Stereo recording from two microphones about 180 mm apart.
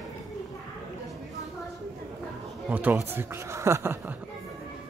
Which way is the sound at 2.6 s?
10° right (ahead or behind).